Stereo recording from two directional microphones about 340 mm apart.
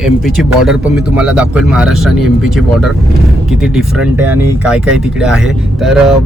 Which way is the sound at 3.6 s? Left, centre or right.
Centre.